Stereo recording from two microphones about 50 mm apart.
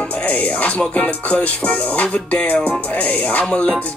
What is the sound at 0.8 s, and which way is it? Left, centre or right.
Music, left.